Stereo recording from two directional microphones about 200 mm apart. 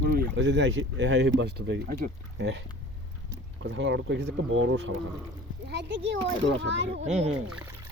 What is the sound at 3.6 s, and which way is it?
Speech, 65° right (ahead or behind).